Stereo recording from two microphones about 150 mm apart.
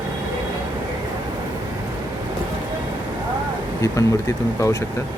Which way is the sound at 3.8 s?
20° left (ahead or behind).